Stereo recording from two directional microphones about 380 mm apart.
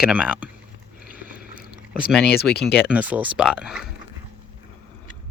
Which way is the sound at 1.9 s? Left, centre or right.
Centre.